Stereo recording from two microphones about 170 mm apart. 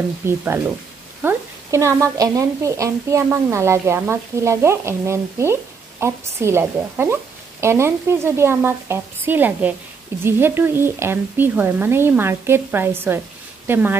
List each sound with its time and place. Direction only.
0.2 s a woman's voice: 15° right (ahead or behind)